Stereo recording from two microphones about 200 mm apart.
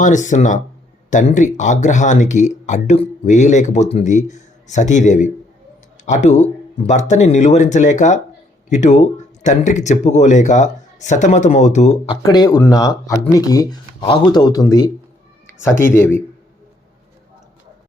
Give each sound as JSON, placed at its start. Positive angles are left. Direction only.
{"t": 0.0, "sound": "speech", "side_deg": 40}
{"t": 12.2, "sound": "speech", "side_deg": 20}